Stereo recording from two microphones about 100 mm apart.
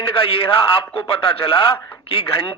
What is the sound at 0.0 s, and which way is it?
Speech, 60° left (ahead or behind).